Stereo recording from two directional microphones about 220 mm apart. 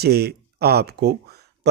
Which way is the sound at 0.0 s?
45° right (ahead or behind).